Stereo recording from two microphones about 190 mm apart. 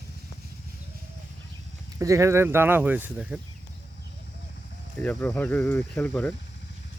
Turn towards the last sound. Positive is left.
turn(degrees=10)  # may be behind; listen again after turning